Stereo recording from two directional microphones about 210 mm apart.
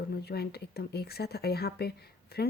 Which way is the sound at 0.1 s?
50° left (ahead or behind).